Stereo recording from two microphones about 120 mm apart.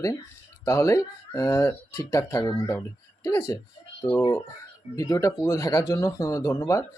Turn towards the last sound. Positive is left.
turn(degrees=25)  # may be behind; listen again after turning